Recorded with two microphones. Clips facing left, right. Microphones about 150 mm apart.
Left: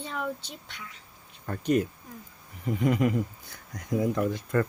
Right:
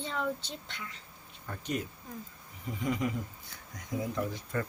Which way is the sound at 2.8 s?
65° left (ahead or behind).